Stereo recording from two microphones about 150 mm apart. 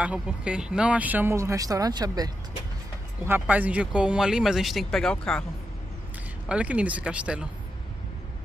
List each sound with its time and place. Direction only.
0.0 s speech: 5° right (ahead or behind); by 2.3 s 25° right (ahead or behind)
3.3 s speech: 10° right (ahead or behind); by 5.4 s 5° left (ahead or behind)
6.5 s speech: 10° right (ahead or behind)